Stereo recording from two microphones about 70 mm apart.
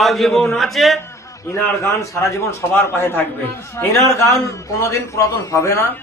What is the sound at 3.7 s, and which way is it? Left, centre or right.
A man's voice, left.